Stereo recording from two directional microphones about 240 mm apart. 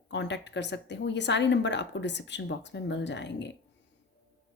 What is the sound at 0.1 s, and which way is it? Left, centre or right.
A woman's voice, left.